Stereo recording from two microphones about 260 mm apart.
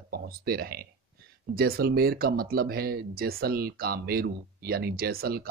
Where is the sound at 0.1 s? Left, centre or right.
Right.